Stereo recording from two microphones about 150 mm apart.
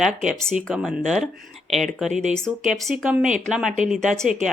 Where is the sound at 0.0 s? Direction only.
Centre (ahead or behind).